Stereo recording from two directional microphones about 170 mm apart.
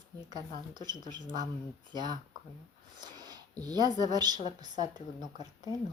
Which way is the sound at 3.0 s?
25° right (ahead or behind).